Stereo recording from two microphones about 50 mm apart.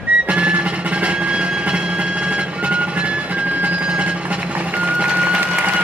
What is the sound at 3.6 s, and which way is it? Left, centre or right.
Music, right.